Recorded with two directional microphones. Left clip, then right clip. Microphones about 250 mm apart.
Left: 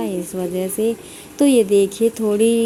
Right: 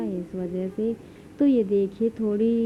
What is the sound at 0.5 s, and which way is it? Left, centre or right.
Speech, centre.